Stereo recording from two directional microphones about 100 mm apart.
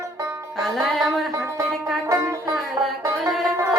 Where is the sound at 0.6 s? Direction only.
Centre (ahead or behind).